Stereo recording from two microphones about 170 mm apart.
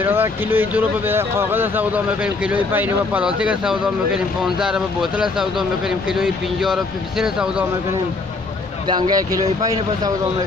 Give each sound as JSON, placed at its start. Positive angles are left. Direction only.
{"t": 0.0, "sound": "speech", "side_deg": -10}
{"t": 8.8, "sound": "speech", "side_deg": -25}